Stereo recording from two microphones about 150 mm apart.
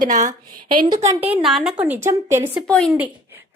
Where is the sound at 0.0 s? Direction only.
60° right (ahead or behind).